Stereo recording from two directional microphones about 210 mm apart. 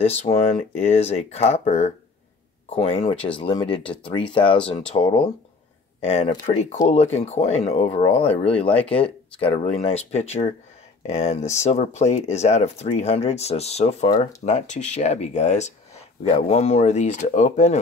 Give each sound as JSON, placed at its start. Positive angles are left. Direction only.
{"t": 0.0, "sound": "speech", "side_deg": 30}